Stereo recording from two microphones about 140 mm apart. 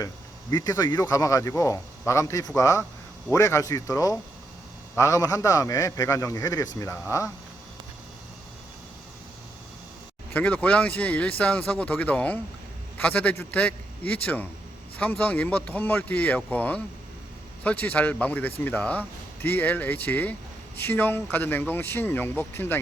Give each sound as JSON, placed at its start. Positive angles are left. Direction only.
{"t": 0.5, "sound": "a man's voice", "side_deg": 25}
{"t": 10.3, "sound": "speech", "side_deg": 10}